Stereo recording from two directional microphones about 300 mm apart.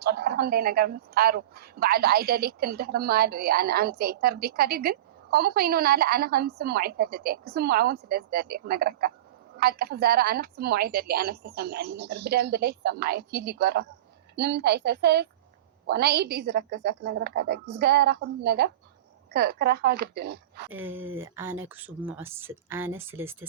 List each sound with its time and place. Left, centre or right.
0.0 s a woman's voice: right
20.7 s speech: centre